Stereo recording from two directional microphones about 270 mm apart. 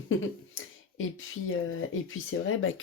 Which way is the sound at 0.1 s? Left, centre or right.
Left.